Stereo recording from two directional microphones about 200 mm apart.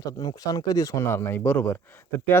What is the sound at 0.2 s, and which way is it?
Speech, 20° left (ahead or behind).